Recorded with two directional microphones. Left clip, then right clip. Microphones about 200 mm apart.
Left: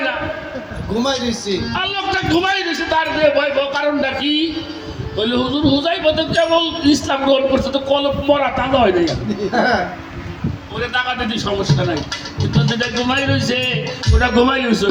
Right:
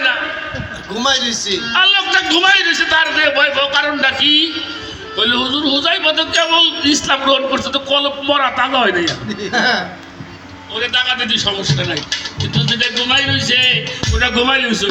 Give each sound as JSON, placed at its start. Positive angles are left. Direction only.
{"t": 0.9, "sound": "speech", "side_deg": 35}
{"t": 10.8, "sound": "speech", "side_deg": 45}